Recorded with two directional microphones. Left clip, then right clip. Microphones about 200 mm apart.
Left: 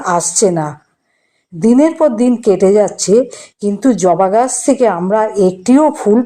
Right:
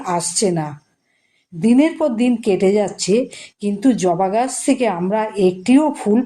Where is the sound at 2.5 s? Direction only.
Centre (ahead or behind).